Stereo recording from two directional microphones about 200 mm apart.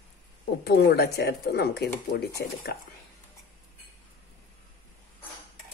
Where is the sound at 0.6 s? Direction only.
55° left (ahead or behind).